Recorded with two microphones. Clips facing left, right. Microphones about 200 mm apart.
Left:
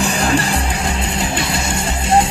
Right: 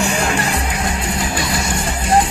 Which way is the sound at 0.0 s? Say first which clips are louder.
Left 2 dB; 35° left (ahead or behind).